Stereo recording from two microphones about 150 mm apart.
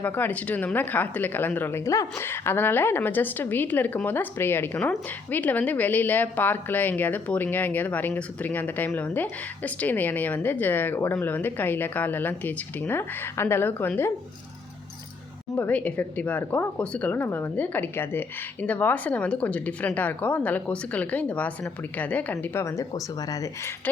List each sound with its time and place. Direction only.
0.0 s speech: 10° left (ahead or behind)
15.5 s speech: 10° left (ahead or behind)